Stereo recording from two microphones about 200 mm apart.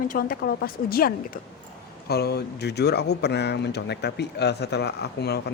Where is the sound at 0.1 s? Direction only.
45° left (ahead or behind).